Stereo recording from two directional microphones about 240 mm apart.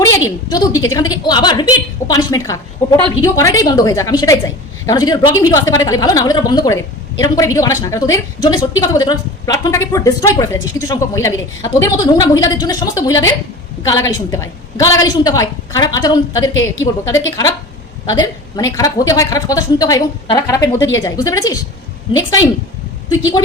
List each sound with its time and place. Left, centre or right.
0.3 s a woman's voice: centre